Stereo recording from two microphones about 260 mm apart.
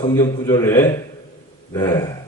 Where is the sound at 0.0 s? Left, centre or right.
Centre.